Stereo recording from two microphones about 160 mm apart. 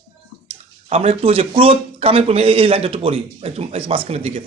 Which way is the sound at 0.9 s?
40° right (ahead or behind).